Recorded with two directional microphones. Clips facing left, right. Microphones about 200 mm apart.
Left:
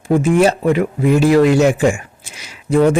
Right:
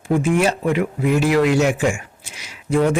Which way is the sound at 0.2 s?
35° left (ahead or behind).